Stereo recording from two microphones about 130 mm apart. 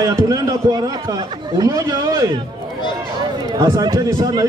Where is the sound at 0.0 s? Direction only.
25° right (ahead or behind).